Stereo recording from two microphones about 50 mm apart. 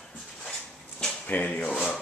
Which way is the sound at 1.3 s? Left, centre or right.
Left.